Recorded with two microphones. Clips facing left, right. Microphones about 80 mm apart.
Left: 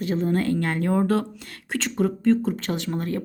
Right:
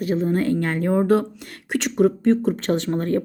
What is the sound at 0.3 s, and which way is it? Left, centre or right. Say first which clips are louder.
Speech: right 2 dB; right.